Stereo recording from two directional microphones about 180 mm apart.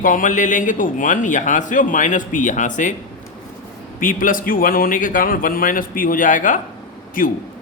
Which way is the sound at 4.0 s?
50° left (ahead or behind).